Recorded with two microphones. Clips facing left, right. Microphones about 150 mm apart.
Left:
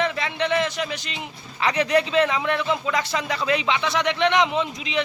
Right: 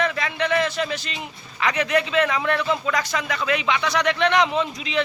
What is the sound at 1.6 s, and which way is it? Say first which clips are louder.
Speech: left 1 dB; 30° left (ahead or behind).